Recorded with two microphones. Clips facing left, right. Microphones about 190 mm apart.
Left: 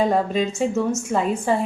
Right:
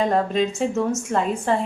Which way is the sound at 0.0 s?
5° left (ahead or behind).